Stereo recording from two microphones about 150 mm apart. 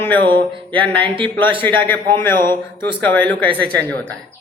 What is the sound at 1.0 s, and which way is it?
Speech, 35° right (ahead or behind).